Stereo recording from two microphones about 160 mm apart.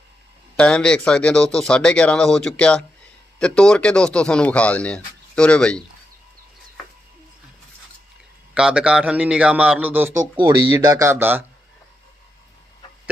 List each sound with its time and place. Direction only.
0.5 s a man's voice: 5° left (ahead or behind)
8.5 s a man's voice: 5° right (ahead or behind)
10.3 s a man's voice: 25° right (ahead or behind)